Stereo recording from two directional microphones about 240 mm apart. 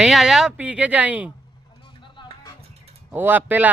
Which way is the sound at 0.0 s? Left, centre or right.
Centre.